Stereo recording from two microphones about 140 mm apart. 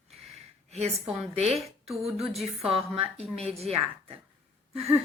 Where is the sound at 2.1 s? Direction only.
Centre (ahead or behind).